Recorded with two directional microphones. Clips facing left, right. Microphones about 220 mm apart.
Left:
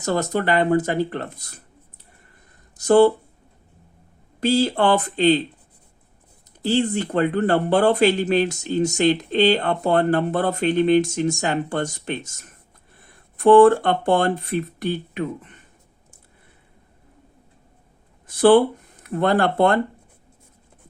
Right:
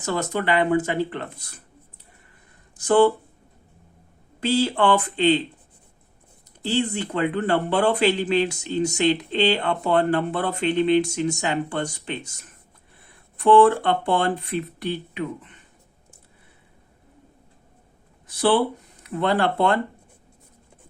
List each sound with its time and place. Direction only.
0.0 s speech: 40° left (ahead or behind)
2.7 s speech: 40° left (ahead or behind)
4.4 s speech: 40° left (ahead or behind)
6.6 s speech: 45° left (ahead or behind)
18.3 s speech: 50° left (ahead or behind)